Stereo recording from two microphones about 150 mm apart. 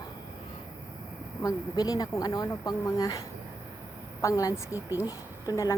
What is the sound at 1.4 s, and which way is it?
Speech, 25° left (ahead or behind).